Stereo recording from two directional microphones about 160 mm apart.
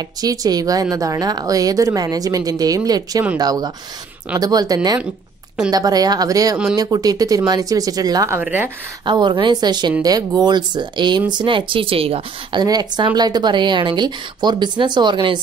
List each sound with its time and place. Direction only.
0.2 s speech: 25° right (ahead or behind)
8.4 s speech: 10° right (ahead or behind)
9.0 s a woman's voice: 30° right (ahead or behind)
12.6 s speech: 25° right (ahead or behind)